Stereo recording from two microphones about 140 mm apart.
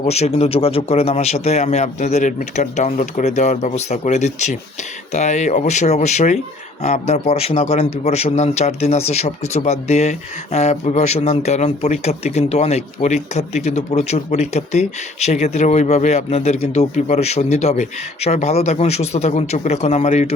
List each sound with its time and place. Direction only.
0.1 s a man's voice: 45° left (ahead or behind)